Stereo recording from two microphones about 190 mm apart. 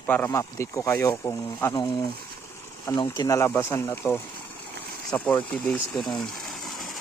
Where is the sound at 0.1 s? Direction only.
15° left (ahead or behind).